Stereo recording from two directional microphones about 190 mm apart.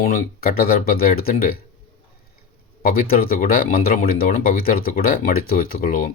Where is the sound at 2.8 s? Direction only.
50° left (ahead or behind).